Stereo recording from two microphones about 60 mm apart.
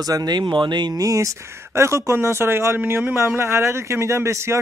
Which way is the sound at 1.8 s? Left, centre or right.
Right.